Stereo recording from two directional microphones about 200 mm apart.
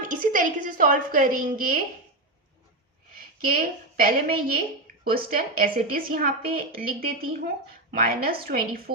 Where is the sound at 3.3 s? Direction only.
45° right (ahead or behind).